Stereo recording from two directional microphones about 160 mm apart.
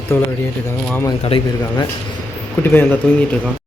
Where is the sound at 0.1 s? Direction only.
15° left (ahead or behind).